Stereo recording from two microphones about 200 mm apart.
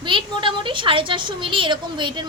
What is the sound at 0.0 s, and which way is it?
A woman's voice, 25° right (ahead or behind).